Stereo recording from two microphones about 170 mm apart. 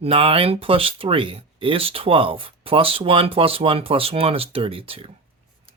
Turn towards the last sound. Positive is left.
turn(degrees=-35)  # may be behind; listen again after turning